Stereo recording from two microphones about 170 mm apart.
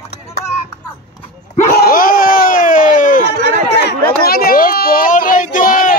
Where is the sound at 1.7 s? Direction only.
60° left (ahead or behind).